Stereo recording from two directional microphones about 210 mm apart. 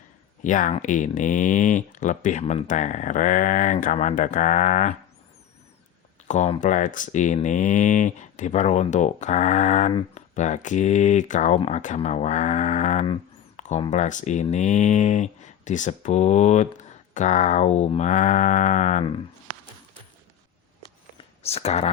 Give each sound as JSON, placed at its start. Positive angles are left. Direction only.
{"t": 0.4, "sound": "speech", "side_deg": 40}
{"t": 6.2, "sound": "speech", "side_deg": 35}
{"t": 13.6, "sound": "a sound", "side_deg": 35}
{"t": 13.9, "sound": "speech", "side_deg": 35}
{"t": 21.4, "sound": "speech", "side_deg": 30}